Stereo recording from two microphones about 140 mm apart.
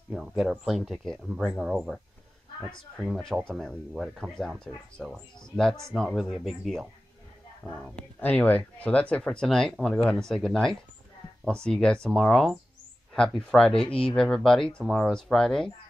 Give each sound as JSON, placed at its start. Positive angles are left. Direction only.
{"t": 0.1, "sound": "speech", "side_deg": 0}
{"t": 3.1, "sound": "speech", "side_deg": 0}
{"t": 7.9, "sound": "speech", "side_deg": 10}